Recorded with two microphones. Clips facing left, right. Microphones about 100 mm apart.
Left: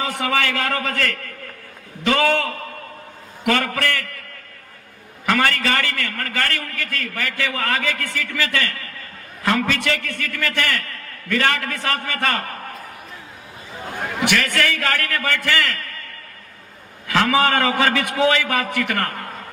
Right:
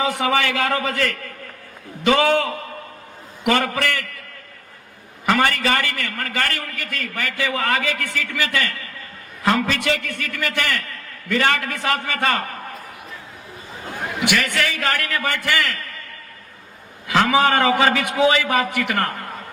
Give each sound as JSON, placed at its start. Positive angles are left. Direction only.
{"t": 0.2, "sound": "a man's voice", "side_deg": -15}
{"t": 5.3, "sound": "a man's voice", "side_deg": -20}
{"t": 14.3, "sound": "a man's voice", "side_deg": -15}
{"t": 17.1, "sound": "a man's voice", "side_deg": -20}